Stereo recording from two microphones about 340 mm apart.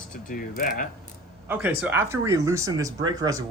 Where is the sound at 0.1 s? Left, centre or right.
Left.